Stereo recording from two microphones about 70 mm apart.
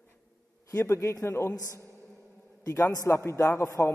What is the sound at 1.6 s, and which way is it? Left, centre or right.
Speech, right.